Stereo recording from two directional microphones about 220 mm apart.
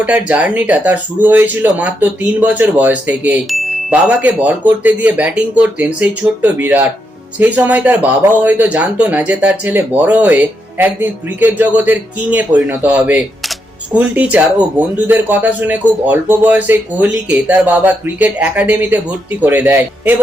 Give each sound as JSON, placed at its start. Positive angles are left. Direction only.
{"t": 0.0, "sound": "speech", "side_deg": -5}